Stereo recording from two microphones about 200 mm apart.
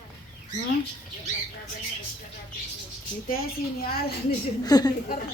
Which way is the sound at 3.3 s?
50° left (ahead or behind).